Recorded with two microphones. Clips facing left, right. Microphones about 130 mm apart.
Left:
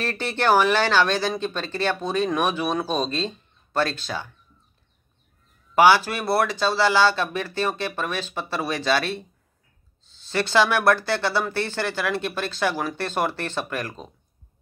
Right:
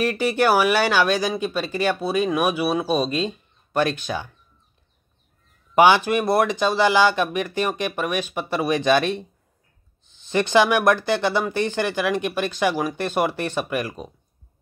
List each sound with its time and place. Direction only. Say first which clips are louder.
0.0 s speech: right 4 dB; 10° right (ahead or behind)
5.8 s speech: right 2 dB; 20° right (ahead or behind)